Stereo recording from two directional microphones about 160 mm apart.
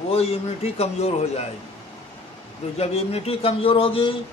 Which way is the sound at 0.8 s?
40° left (ahead or behind).